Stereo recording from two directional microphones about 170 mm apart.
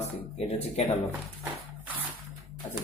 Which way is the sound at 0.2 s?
35° left (ahead or behind).